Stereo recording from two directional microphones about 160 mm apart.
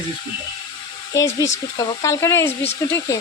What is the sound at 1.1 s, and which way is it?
Speech, 20° left (ahead or behind).